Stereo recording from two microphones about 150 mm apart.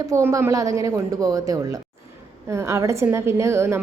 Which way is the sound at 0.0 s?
20° right (ahead or behind).